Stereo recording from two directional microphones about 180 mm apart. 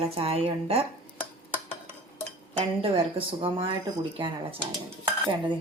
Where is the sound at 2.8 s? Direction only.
30° right (ahead or behind).